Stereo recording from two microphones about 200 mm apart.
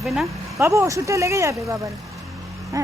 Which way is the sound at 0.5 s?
15° right (ahead or behind).